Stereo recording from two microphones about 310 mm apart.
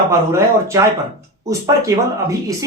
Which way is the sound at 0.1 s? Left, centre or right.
Centre.